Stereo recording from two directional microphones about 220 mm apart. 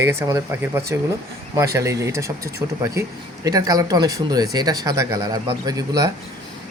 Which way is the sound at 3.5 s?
15° right (ahead or behind).